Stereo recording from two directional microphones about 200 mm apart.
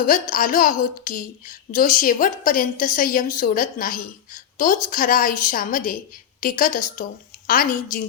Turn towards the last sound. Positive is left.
turn(degrees=40)  # may be behind; listen again after turning